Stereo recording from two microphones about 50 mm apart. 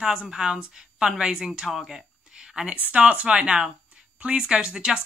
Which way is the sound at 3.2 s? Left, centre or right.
Centre.